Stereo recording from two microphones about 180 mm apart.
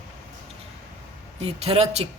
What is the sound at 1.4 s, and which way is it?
Speech, 35° right (ahead or behind).